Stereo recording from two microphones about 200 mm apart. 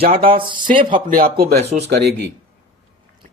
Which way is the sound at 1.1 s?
45° right (ahead or behind).